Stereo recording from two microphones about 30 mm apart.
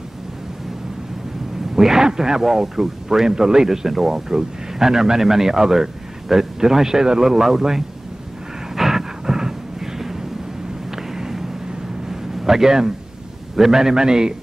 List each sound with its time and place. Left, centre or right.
1.8 s a man's voice: centre
8.7 s vehicle: centre
9.2 s a sound: centre
13.6 s a man's voice: centre